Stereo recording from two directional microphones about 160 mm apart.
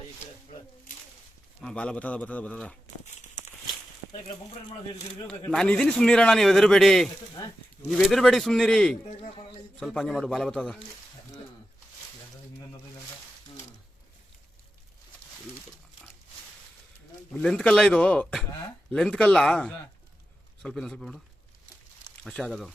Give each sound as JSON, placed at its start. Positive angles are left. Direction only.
{"t": 1.6, "sound": "a man's voice", "side_deg": 5}
{"t": 5.5, "sound": "a man's voice", "side_deg": 5}
{"t": 7.4, "sound": "speech", "side_deg": 25}
{"t": 7.9, "sound": "a man's voice", "side_deg": 0}
{"t": 17.3, "sound": "a man's voice", "side_deg": 5}
{"t": 22.2, "sound": "a man's voice", "side_deg": 5}